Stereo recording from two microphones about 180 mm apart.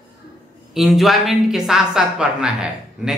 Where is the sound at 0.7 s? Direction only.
Centre (ahead or behind).